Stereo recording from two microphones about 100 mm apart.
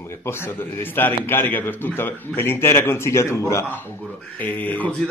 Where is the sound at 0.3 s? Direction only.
25° left (ahead or behind).